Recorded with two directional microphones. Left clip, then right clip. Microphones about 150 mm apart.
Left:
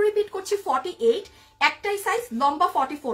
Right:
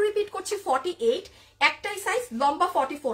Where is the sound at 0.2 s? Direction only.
20° right (ahead or behind).